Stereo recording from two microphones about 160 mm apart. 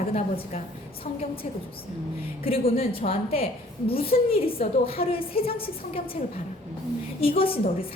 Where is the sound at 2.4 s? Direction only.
35° left (ahead or behind).